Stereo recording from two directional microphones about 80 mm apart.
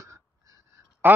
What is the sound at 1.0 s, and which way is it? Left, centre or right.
Speech, right.